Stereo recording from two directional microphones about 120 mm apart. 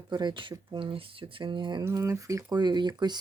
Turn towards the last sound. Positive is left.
turn(degrees=-35)  # may be behind; listen again after turning